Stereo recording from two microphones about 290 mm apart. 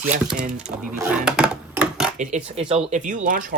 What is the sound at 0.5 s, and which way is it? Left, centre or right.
Speech, centre.